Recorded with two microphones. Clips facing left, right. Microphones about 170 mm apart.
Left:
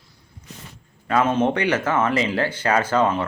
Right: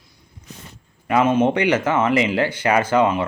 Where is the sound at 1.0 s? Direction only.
15° right (ahead or behind).